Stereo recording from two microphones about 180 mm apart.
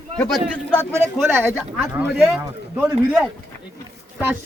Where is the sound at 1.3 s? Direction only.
10° right (ahead or behind).